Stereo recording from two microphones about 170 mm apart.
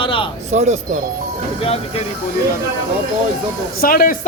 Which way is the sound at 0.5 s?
40° right (ahead or behind).